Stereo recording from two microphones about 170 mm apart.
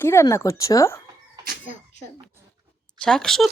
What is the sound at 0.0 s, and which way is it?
Speech, 15° left (ahead or behind).